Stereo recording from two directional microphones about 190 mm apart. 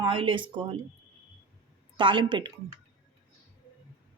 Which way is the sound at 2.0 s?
25° right (ahead or behind).